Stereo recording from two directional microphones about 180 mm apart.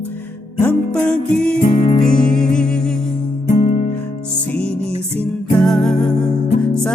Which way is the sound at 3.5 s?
40° left (ahead or behind).